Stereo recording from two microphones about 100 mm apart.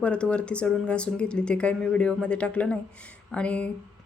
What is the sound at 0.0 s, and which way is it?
A woman's voice, 10° left (ahead or behind).